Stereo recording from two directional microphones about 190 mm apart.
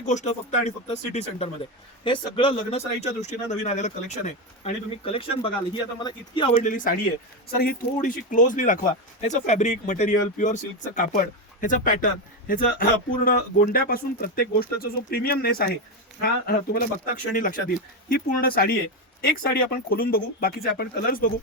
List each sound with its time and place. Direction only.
0.0 s speech: 40° left (ahead or behind); by 6.5 s 25° left (ahead or behind)
6.6 s a man's voice: 45° left (ahead or behind)